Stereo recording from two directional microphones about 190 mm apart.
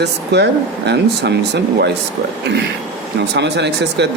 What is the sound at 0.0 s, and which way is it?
Speech, 65° right (ahead or behind).